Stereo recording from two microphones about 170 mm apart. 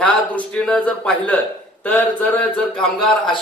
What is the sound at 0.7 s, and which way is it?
A man's voice, 10° left (ahead or behind).